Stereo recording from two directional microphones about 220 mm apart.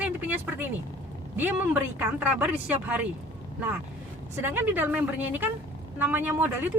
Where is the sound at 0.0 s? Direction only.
10° right (ahead or behind).